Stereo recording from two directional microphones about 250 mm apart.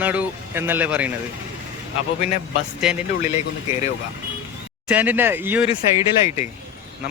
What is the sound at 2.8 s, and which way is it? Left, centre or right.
Speech, centre.